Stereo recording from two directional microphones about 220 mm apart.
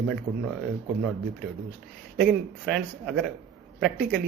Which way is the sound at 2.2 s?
Centre (ahead or behind).